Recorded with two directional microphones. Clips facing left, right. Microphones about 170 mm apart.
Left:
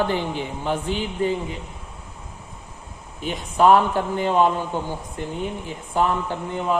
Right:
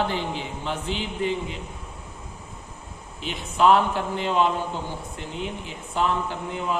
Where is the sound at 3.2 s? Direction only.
45° left (ahead or behind).